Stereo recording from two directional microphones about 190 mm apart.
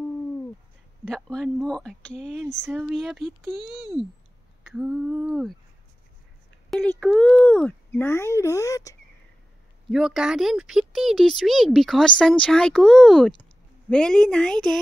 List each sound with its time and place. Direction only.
1.0 s speech: 5° left (ahead or behind)
2.6 s speech: 5° right (ahead or behind)
6.7 s speech: 5° left (ahead or behind)
9.8 s speech: centre (ahead or behind)